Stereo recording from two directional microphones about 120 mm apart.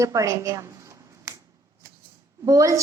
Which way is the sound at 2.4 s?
25° right (ahead or behind).